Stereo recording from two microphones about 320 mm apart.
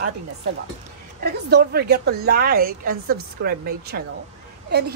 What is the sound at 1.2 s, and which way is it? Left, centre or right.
Speech, right.